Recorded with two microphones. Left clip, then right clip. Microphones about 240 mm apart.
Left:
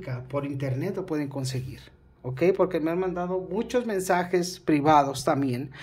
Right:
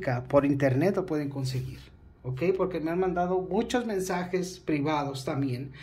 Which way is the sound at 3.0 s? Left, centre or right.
Centre.